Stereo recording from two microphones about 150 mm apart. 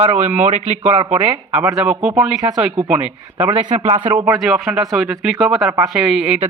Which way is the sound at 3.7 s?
50° right (ahead or behind).